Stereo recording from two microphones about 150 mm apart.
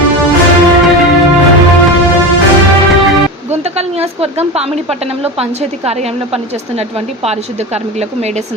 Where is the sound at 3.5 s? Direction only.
45° right (ahead or behind).